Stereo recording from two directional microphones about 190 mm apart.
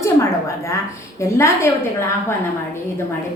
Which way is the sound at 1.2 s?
15° left (ahead or behind).